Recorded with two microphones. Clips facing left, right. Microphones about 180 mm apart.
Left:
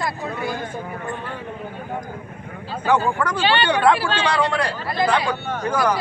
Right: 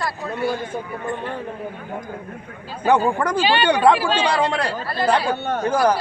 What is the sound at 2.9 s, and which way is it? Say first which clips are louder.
Speech: right 2 dB; 20° right (ahead or behind).